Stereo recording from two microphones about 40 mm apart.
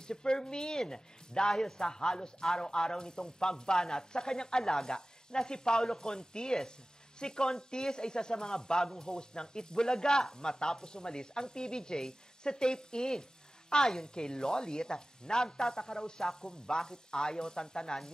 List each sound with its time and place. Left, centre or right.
0.0 s speech: centre